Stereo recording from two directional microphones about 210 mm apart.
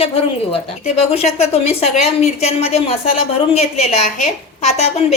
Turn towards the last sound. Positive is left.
turn(degrees=30)  # may be behind; listen again after turning